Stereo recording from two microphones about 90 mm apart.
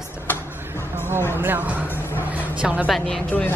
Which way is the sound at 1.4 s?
20° right (ahead or behind).